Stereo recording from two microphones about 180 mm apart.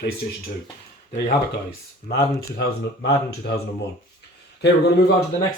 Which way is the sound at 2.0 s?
65° left (ahead or behind).